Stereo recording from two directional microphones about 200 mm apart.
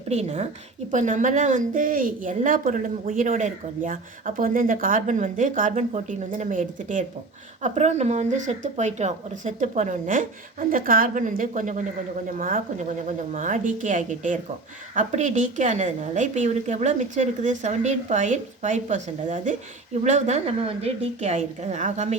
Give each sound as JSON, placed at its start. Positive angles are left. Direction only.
{"t": 0.1, "sound": "a woman's voice", "side_deg": -35}